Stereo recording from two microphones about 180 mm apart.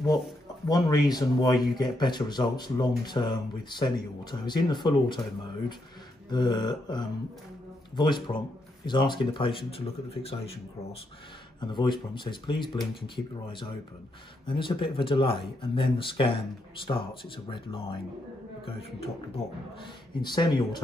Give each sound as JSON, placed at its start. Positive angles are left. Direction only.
{"t": 0.7, "sound": "speech", "side_deg": 20}
{"t": 6.3, "sound": "speech", "side_deg": 25}
{"t": 11.6, "sound": "speech", "side_deg": 25}